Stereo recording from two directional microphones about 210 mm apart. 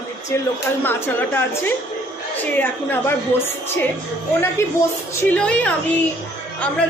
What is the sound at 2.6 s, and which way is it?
A woman's voice, 10° left (ahead or behind).